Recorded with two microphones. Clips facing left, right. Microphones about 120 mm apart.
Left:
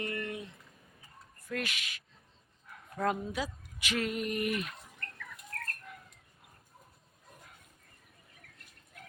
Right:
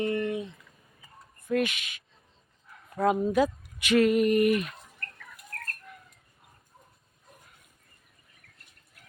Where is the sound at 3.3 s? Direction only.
55° right (ahead or behind).